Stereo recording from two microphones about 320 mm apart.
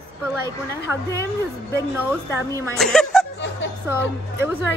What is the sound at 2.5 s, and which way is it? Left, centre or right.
A woman's voice, centre.